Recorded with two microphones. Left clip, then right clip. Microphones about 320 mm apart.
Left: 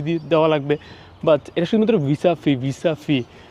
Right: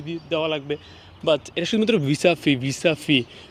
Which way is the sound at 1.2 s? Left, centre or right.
Centre.